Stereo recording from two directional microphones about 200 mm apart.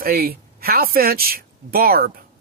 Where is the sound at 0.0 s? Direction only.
50° right (ahead or behind).